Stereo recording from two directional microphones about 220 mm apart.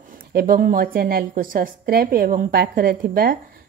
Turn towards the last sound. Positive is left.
turn(degrees=-40)  # may be behind; listen again after turning